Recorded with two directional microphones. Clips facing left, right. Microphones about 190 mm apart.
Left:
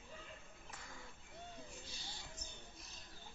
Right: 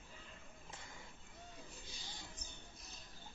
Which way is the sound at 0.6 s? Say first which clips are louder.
Even; 25° right (ahead or behind).